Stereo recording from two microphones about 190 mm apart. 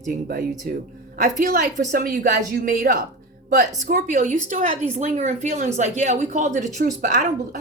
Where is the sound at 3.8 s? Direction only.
40° right (ahead or behind).